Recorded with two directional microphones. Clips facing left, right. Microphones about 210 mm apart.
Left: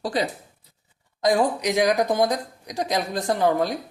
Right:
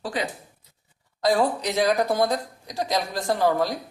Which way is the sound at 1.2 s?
15° left (ahead or behind).